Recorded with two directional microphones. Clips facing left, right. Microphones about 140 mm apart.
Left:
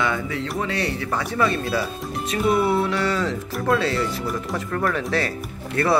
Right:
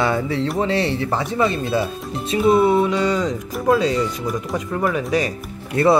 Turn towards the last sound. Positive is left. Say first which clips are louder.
# right 5 dB
turn(degrees=-20)  # may be behind; listen again after turning